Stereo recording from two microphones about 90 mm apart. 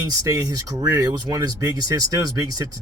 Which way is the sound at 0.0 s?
40° right (ahead or behind).